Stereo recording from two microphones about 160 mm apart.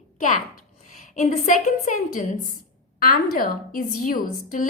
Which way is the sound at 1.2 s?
50° left (ahead or behind).